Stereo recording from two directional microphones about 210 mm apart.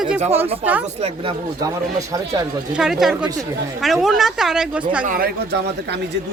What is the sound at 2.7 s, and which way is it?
Speech, centre (ahead or behind).